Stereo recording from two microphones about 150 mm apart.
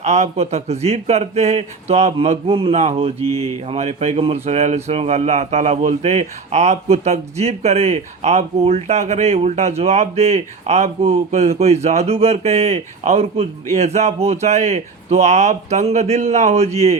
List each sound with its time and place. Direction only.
0.0 s speech: 45° right (ahead or behind)